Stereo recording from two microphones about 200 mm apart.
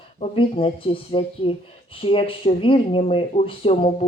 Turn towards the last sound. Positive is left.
turn(degrees=30)  # may be behind; listen again after turning